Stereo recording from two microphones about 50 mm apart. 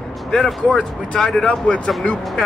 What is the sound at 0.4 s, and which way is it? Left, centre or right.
Speech, centre.